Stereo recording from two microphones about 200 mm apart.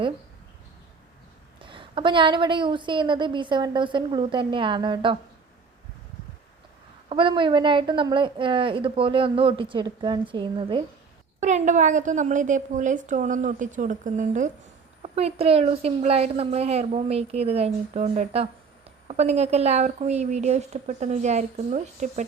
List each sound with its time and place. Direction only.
1.6 s a woman's voice: 25° right (ahead or behind)
7.1 s a woman's voice: 25° right (ahead or behind)
11.3 s a woman's voice: 35° right (ahead or behind)